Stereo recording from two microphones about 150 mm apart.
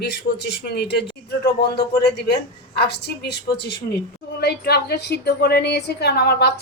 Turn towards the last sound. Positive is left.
turn(degrees=90)